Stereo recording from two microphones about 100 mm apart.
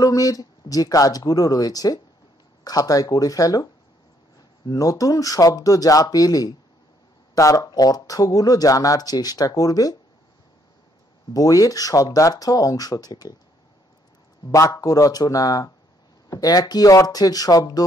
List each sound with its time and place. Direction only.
0.0 s speech: 35° left (ahead or behind)
11.3 s speech: 35° left (ahead or behind)
14.5 s speech: 35° left (ahead or behind)